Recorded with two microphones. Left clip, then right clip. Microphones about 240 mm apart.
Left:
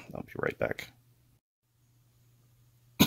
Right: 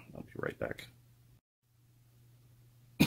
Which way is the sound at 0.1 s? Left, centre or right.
Left.